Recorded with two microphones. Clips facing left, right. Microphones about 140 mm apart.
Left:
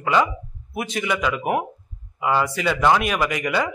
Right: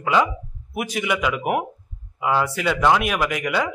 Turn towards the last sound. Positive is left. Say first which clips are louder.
# even
turn(degrees=0)  # may be behind; listen again after turning